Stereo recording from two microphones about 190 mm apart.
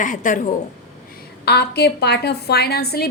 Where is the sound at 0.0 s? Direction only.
45° left (ahead or behind).